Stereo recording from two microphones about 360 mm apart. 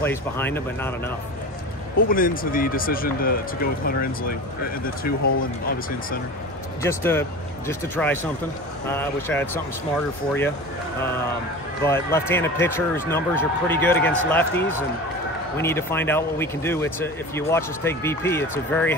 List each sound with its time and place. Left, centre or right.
0.0 s speech: centre
2.0 s speech: left
6.8 s speech: centre
11.8 s speech: centre